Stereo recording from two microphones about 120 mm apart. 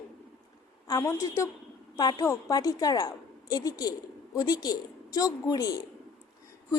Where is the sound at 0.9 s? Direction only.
30° left (ahead or behind).